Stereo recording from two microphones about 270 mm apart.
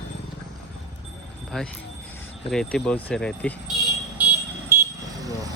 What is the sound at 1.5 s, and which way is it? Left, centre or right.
Speech, centre.